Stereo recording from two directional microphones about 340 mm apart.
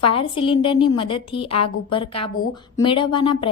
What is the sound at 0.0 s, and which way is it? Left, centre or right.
A woman's voice, centre.